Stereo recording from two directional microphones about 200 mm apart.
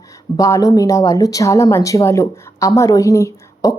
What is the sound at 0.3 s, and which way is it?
A woman's voice, 15° left (ahead or behind).